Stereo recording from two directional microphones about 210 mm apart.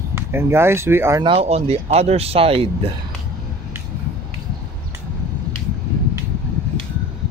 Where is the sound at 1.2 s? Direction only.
25° right (ahead or behind).